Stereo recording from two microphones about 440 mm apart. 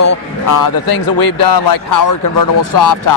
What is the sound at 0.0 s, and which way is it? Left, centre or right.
Speech, left.